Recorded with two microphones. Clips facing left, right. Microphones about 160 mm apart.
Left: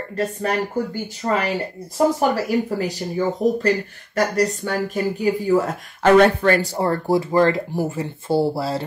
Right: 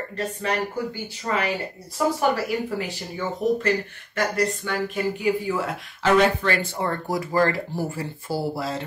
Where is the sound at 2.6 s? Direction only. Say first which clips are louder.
Left 5 dB; 40° left (ahead or behind).